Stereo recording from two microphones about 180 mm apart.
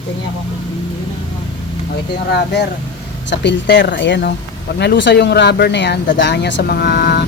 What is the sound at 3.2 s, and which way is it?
Speech, 80° left.